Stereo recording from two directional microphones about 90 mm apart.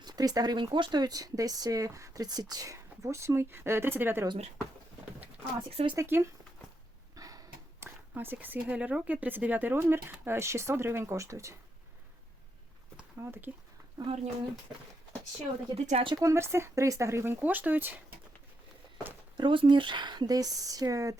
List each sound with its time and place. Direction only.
0.0 s speech: 50° right (ahead or behind); by 4.3 s 25° right (ahead or behind)
5.7 s speech: 65° right (ahead or behind)
6.0 s speech: 30° right (ahead or behind)
7.2 s a sound: 45° right (ahead or behind)
7.8 s speech: 25° right (ahead or behind)
13.2 s speech: 25° right (ahead or behind)
14.1 s speech: 90° right
15.7 s speech: 90° right
16.1 s speech: 35° right (ahead or behind)
19.4 s speech: 60° right (ahead or behind); by 21.2 s 40° right (ahead or behind)